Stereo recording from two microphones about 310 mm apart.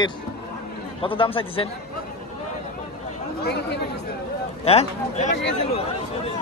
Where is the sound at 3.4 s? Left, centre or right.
Left.